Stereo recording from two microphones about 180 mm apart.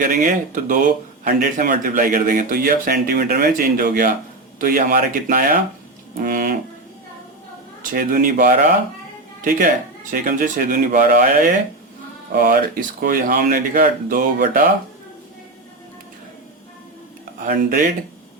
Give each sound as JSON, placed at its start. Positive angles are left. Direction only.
{"t": 0.0, "sound": "speech", "side_deg": -50}
{"t": 6.1, "sound": "music", "side_deg": -50}
{"t": 7.8, "sound": "speech", "side_deg": -50}
{"t": 17.4, "sound": "speech", "side_deg": -50}